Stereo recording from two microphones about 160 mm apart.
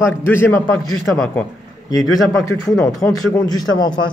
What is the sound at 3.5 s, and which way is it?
Speech, 25° left (ahead or behind).